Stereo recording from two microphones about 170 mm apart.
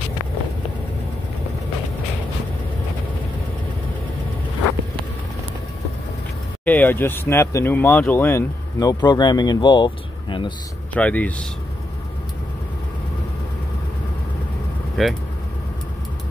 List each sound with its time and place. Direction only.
6.6 s speech: 10° left (ahead or behind); by 10.5 s 30° left (ahead or behind)
11.0 s speech: 10° left (ahead or behind)
15.0 s speech: centre (ahead or behind)